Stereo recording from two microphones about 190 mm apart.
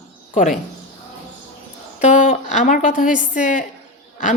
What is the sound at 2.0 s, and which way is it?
A woman's voice, 40° left (ahead or behind).